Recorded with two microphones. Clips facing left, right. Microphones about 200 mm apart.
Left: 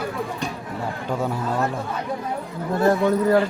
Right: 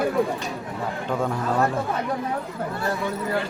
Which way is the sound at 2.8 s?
45° left (ahead or behind).